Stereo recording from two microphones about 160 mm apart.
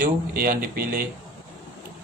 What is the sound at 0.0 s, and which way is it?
Speech, 65° right (ahead or behind).